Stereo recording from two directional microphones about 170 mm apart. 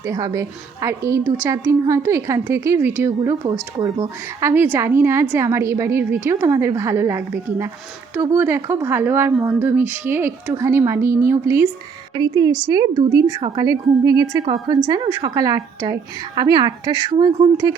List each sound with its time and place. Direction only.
0.0 s a woman's voice: 20° right (ahead or behind)